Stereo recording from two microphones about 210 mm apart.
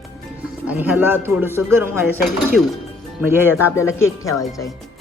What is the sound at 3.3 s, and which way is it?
Speech, 10° right (ahead or behind).